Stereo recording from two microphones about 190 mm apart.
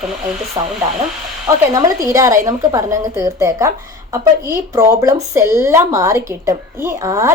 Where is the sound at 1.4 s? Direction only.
15° right (ahead or behind).